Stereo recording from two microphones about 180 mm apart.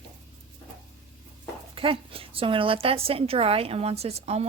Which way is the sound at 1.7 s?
30° right (ahead or behind).